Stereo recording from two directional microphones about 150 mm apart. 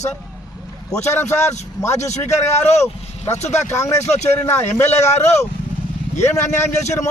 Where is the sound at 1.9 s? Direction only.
50° left (ahead or behind).